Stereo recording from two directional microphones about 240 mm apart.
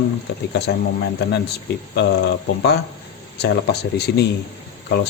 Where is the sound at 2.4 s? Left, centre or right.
Left.